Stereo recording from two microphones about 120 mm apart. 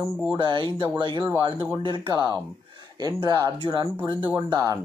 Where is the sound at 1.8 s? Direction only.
40° right (ahead or behind).